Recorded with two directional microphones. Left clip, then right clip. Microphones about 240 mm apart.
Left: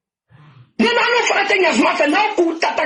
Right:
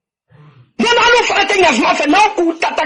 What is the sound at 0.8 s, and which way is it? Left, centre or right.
A woman's voice, right.